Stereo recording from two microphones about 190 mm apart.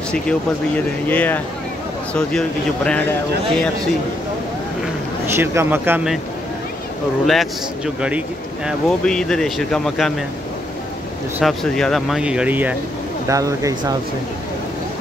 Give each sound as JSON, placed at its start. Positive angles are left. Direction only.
{"t": 0.1, "sound": "speech", "side_deg": 5}
{"t": 5.3, "sound": "speech", "side_deg": -15}
{"t": 7.2, "sound": "speech", "side_deg": 0}
{"t": 11.3, "sound": "speech", "side_deg": 0}